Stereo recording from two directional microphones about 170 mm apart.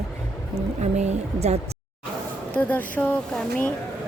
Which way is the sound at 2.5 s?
10° left (ahead or behind).